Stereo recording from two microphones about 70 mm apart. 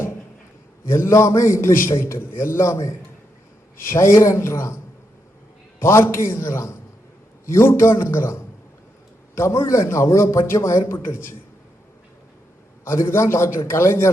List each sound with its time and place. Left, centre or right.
0.9 s a man's voice: left
5.8 s a man's voice: left
12.8 s a man's voice: left